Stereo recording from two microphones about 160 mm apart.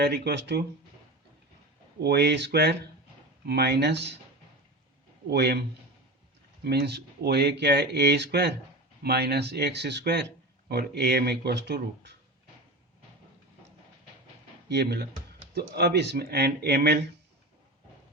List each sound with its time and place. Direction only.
0.0 s speech: 90° right
2.0 s speech: 90° right
5.3 s speech: 90° right
6.7 s speech: 90° right
14.7 s speech: 90° right